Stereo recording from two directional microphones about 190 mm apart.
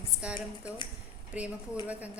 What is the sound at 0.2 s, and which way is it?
A woman's voice, 5° right (ahead or behind).